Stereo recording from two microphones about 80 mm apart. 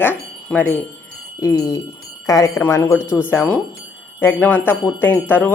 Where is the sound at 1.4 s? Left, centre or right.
Left.